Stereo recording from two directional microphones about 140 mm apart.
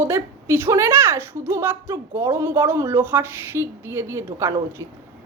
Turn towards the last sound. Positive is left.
turn(degrees=-20)  # may be behind; listen again after turning